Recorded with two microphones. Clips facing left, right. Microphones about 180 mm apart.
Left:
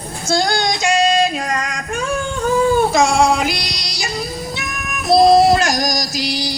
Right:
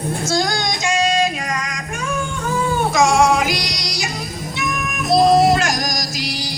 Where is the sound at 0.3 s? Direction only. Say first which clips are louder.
Left 5 dB; 30° left (ahead or behind).